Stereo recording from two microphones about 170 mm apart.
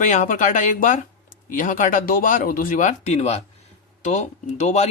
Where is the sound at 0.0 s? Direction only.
45° left (ahead or behind).